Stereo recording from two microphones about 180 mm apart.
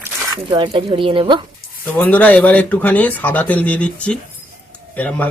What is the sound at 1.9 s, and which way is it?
Speech, 10° left (ahead or behind).